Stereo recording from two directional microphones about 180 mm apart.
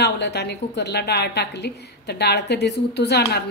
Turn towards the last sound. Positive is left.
turn(degrees=65)  # may be behind; listen again after turning